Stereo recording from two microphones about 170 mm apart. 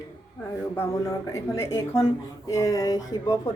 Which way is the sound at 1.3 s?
15° left (ahead or behind).